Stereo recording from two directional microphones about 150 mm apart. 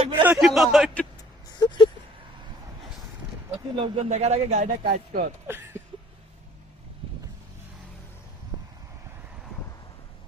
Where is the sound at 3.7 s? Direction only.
35° right (ahead or behind).